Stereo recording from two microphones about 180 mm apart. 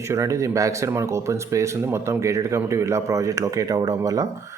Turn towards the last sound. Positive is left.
turn(degrees=-20)  # may be behind; listen again after turning